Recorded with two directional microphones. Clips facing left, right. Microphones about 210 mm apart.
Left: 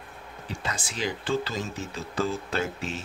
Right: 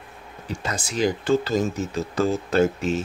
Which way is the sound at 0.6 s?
45° right (ahead or behind).